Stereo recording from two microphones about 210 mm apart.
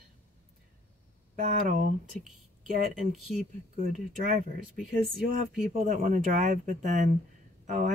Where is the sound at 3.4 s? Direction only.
35° right (ahead or behind).